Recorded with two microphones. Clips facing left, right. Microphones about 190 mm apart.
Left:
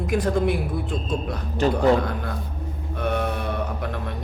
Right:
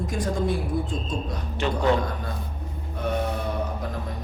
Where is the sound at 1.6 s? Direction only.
40° left (ahead or behind).